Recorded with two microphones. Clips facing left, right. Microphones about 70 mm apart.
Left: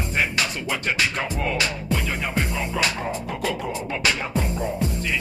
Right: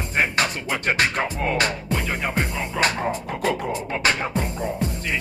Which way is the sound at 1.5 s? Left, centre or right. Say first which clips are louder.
Right 2 dB; right.